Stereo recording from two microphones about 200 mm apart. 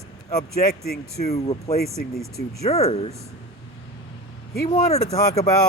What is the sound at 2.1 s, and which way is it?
Speech, centre (ahead or behind).